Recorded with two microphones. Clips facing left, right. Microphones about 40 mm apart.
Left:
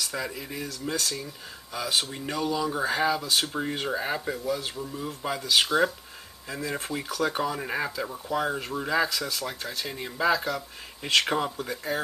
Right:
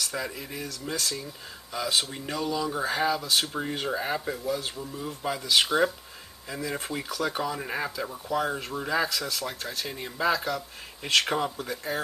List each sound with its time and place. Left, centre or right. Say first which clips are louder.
0.0 s speech: even; centre